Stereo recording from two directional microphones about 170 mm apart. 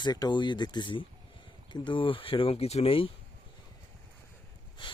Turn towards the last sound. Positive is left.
turn(degrees=30)  # may be behind; listen again after turning